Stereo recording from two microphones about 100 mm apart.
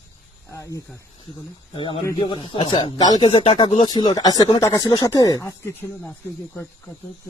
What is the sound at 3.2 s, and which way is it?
Speech, 55° left (ahead or behind).